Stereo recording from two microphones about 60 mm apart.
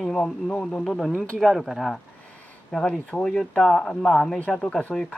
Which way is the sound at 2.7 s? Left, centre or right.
Centre.